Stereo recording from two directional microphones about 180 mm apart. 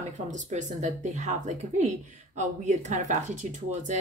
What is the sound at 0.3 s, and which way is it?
Speech, 40° right (ahead or behind).